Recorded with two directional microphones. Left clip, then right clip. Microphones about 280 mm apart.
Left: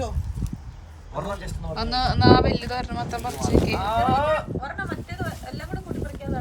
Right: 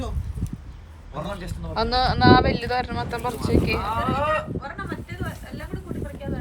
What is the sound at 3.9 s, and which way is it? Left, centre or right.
Speech, left.